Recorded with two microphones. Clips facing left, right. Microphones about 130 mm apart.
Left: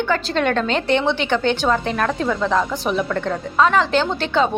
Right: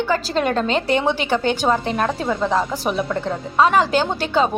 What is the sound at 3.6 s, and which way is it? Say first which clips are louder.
Speech: right 1 dB; 10° right (ahead or behind).